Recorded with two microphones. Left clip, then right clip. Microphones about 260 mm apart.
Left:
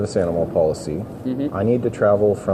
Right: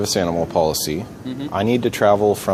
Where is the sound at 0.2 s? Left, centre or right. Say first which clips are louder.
Left 2 dB; right.